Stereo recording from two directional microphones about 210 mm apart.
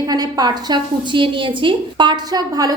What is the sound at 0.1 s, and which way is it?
A woman's voice, 20° right (ahead or behind).